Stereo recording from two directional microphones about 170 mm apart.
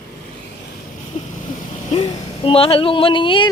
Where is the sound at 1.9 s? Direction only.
30° left (ahead or behind).